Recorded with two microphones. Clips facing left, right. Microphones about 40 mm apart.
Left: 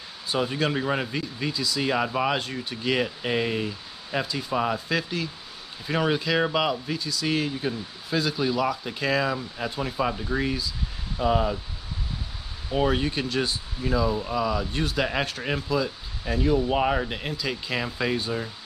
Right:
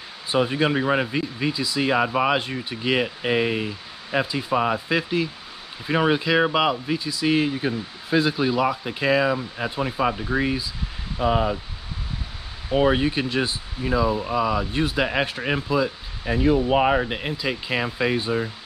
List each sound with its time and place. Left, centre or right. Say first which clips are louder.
0.3 s speech: right 4 dB; right
12.7 s speech: right 4 dB; centre